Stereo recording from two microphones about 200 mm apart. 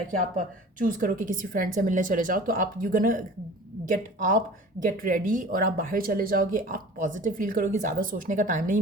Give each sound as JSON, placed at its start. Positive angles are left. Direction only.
{"t": 0.3, "sound": "speech", "side_deg": -40}